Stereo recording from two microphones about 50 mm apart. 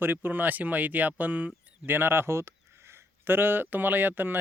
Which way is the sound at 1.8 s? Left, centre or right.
Right.